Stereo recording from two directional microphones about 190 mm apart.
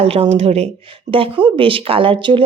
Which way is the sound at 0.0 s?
30° right (ahead or behind).